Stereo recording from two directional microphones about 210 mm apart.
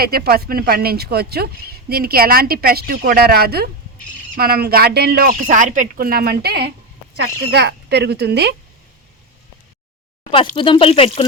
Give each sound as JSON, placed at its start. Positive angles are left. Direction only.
{"t": 0.0, "sound": "speech", "side_deg": -45}
{"t": 10.3, "sound": "speech", "side_deg": 25}